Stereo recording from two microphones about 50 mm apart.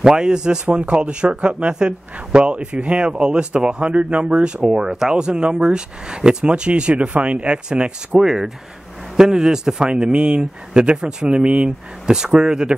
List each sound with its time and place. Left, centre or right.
0.0 s speech: centre
0.7 s speech: right
8.2 s speech: centre